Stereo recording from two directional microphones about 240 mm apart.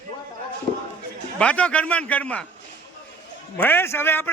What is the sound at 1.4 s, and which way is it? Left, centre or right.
A man's voice, centre.